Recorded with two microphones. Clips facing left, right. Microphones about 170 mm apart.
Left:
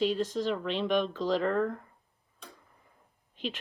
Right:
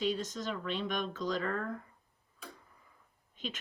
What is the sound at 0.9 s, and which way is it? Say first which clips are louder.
Speech: left 7 dB; 45° right (ahead or behind).